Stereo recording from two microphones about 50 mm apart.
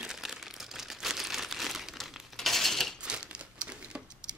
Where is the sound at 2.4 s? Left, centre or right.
Centre.